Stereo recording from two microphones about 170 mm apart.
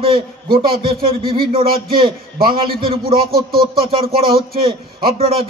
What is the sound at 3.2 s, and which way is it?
Speech, 65° right (ahead or behind).